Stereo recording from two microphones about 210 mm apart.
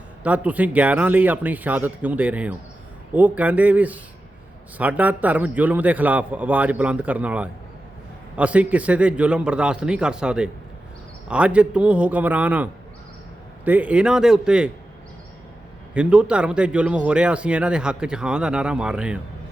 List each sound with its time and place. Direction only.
0.2 s a man's voice: 5° right (ahead or behind)
13.7 s speech: 5° right (ahead or behind)
16.0 s speech: 5° right (ahead or behind)